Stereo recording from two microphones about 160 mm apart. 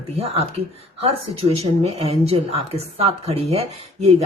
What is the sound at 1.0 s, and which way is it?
Speech, 40° right (ahead or behind).